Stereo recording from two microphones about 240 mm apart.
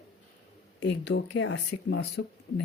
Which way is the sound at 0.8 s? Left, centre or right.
Left.